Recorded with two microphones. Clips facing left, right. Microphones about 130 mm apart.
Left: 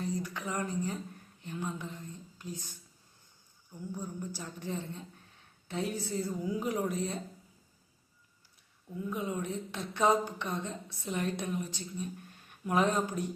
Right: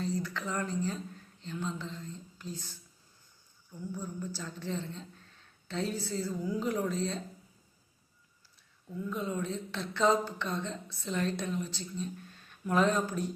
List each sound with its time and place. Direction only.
0.0 s speech: 15° left (ahead or behind)
8.9 s speech: 15° left (ahead or behind)